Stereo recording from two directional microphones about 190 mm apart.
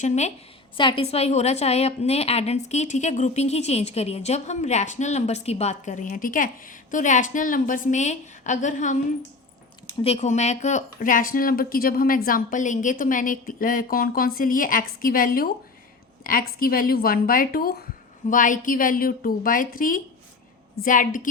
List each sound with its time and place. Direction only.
0.0 s a woman's voice: 35° left (ahead or behind)
0.8 s a woman's voice: 25° left (ahead or behind)
10.0 s speech: 35° left (ahead or behind)